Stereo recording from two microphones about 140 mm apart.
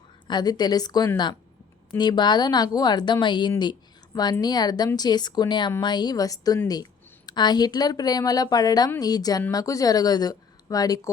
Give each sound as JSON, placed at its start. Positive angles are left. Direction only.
{"t": 0.3, "sound": "a woman's voice", "side_deg": 30}